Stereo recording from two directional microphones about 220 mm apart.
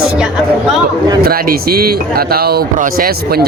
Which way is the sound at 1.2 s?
40° right (ahead or behind).